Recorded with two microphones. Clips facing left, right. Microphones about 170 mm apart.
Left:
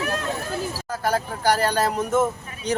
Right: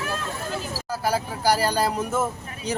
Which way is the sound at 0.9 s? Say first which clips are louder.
Even; 10° right (ahead or behind).